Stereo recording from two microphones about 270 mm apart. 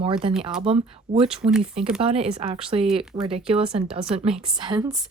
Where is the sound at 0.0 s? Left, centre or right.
Centre.